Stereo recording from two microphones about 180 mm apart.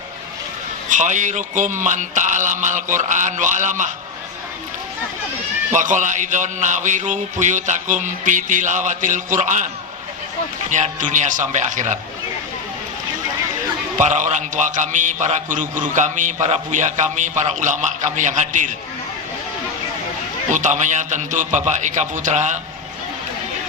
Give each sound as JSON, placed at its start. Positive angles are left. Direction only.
{"t": 0.9, "sound": "a man's voice", "side_deg": -45}
{"t": 5.7, "sound": "a man's voice", "side_deg": -45}
{"t": 10.7, "sound": "a man's voice", "side_deg": -45}
{"t": 14.0, "sound": "a man's voice", "side_deg": -40}
{"t": 20.5, "sound": "a man's voice", "side_deg": -45}